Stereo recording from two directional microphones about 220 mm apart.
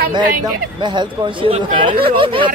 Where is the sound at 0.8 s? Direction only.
20° right (ahead or behind).